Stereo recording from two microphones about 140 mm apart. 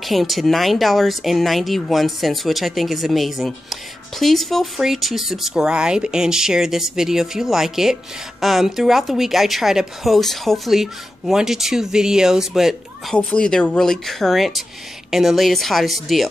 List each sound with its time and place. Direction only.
0.0 s speech: centre (ahead or behind)